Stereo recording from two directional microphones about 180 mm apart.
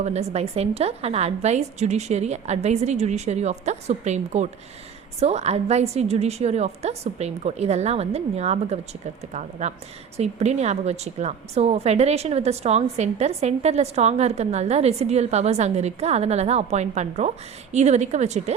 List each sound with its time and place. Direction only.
0.0 s a woman's voice: 35° right (ahead or behind)